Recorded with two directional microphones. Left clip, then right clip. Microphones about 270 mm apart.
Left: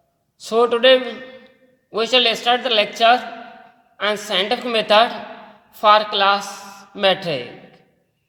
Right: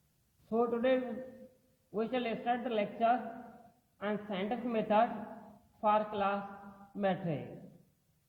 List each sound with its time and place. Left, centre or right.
0.5 s speech: left
2.0 s speech: left